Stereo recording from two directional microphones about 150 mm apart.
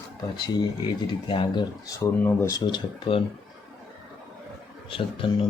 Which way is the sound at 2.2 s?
15° left (ahead or behind).